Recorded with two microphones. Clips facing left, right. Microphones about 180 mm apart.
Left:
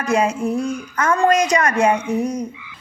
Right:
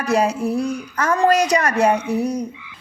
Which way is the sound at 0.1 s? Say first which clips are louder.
Even; 35° right (ahead or behind).